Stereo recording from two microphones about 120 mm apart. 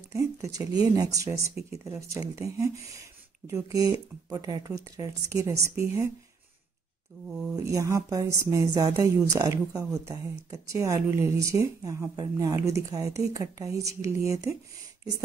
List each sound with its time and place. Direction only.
0.1 s speech: 25° right (ahead or behind)
7.2 s speech: 5° right (ahead or behind)
7.6 s speech: 25° right (ahead or behind)